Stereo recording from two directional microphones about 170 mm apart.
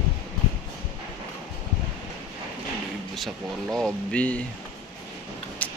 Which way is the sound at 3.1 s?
Centre (ahead or behind).